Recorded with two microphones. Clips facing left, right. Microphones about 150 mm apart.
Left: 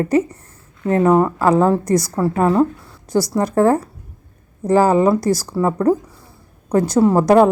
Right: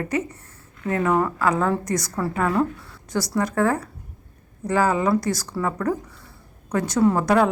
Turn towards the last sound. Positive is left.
turn(degrees=30)  # may be behind; listen again after turning